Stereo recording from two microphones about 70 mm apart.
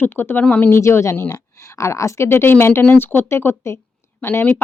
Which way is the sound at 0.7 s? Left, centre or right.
Left.